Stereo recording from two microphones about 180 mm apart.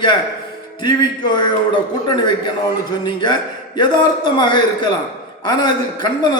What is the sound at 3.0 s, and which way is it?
A man's voice, 25° left (ahead or behind).